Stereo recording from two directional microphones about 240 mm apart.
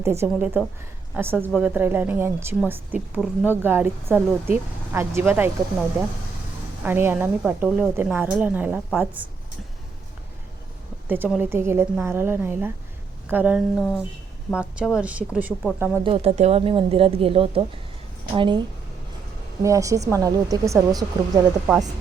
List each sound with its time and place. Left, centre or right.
0.0 s a woman's voice: centre
6.8 s a woman's voice: centre
11.1 s a woman's voice: centre
16.0 s a woman's voice: right
19.6 s a woman's voice: centre